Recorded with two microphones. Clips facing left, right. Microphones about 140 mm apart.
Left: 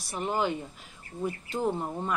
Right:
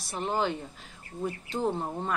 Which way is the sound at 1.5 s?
20° right (ahead or behind).